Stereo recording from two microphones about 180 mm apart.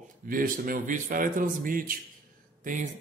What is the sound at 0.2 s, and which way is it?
Speech, 50° right (ahead or behind).